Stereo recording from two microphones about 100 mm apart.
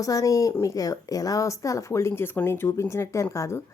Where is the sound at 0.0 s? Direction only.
35° left (ahead or behind).